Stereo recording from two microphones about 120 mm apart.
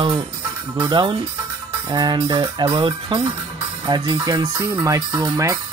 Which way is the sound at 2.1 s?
45° right (ahead or behind).